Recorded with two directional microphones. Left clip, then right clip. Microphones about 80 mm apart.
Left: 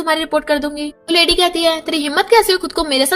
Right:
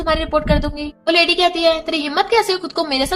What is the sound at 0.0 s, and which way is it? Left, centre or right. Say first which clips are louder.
A woman's voice: left 1 dB; left.